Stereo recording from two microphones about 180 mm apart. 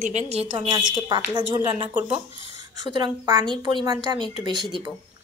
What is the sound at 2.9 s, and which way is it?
A woman's voice, 20° right (ahead or behind).